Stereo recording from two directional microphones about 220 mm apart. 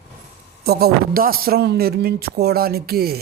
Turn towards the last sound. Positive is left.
turn(degrees=-45)  # may be behind; listen again after turning